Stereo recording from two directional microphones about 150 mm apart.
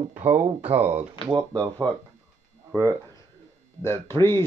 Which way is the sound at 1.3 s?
25° right (ahead or behind).